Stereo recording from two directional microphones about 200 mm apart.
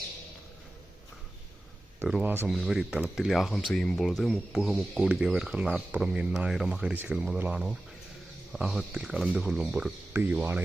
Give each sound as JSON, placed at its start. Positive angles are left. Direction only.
{"t": 2.0, "sound": "speech", "side_deg": -5}